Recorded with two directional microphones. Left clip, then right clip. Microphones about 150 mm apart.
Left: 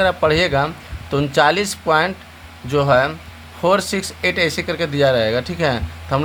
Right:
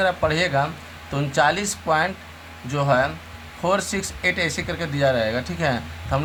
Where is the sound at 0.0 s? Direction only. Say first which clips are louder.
Left 5 dB; 45° left (ahead or behind).